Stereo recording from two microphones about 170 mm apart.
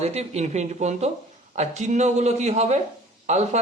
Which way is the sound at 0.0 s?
40° right (ahead or behind).